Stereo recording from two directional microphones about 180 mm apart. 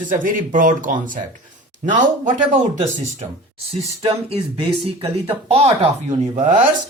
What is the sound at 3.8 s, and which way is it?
Speech, 35° right (ahead or behind).